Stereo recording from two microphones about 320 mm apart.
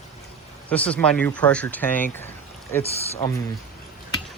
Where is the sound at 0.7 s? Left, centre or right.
Centre.